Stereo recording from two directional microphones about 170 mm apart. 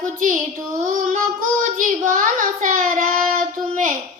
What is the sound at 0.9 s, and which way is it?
Child singing, 50° right (ahead or behind).